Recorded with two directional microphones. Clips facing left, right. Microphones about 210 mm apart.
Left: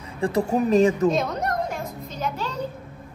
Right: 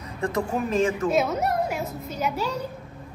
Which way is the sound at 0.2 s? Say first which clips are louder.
Left 4 dB; 35° left (ahead or behind).